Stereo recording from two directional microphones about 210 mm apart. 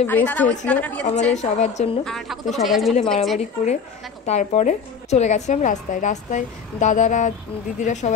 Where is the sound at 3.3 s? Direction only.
35° left (ahead or behind).